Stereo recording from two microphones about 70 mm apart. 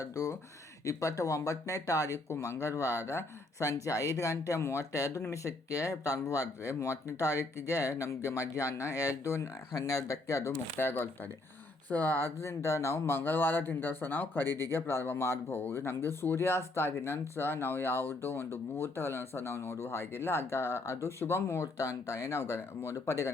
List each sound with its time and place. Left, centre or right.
0.0 s speech: left
10.8 s speech: left
12.4 s speech: left